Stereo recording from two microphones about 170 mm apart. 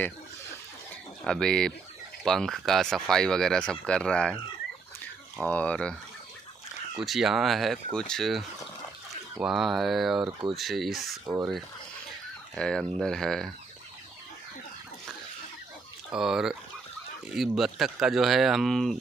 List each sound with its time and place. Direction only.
1.2 s speech: 5° left (ahead or behind)
5.4 s speech: 10° left (ahead or behind)
7.0 s speech: centre (ahead or behind)
12.5 s speech: 5° left (ahead or behind)
16.1 s speech: 5° right (ahead or behind)